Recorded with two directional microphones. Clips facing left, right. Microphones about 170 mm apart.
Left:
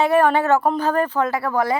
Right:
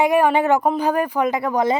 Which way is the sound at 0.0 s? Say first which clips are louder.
Even; 10° right (ahead or behind).